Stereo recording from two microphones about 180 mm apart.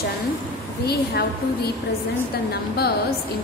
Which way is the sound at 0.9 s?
60° left (ahead or behind).